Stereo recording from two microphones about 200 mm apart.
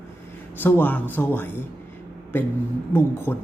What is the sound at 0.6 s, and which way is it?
Speech, 10° left (ahead or behind).